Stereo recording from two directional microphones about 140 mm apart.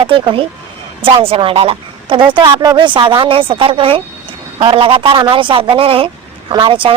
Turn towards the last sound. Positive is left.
turn(degrees=-35)  # may be behind; listen again after turning